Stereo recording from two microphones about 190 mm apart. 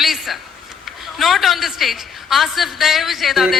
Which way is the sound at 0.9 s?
Centre (ahead or behind).